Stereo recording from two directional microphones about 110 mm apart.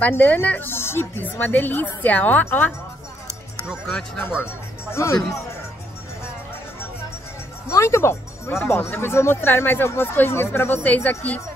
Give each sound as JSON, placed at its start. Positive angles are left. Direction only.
{"t": 0.0, "sound": "a woman's voice", "side_deg": 15}
{"t": 3.8, "sound": "speech", "side_deg": 5}
{"t": 4.9, "sound": "speech", "side_deg": 30}
{"t": 7.6, "sound": "speech", "side_deg": 25}